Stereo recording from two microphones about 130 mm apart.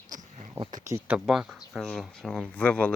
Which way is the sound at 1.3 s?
Centre (ahead or behind).